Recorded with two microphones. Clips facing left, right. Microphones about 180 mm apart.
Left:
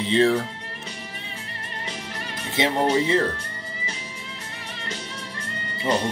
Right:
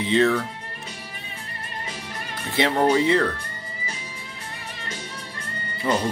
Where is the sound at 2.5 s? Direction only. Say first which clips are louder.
Right 2 dB; 20° left (ahead or behind).